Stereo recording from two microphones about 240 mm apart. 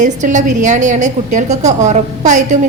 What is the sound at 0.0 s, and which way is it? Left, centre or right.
A woman's voice, right.